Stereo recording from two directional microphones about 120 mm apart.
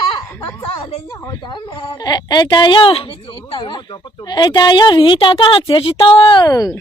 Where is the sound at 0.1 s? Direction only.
40° left (ahead or behind).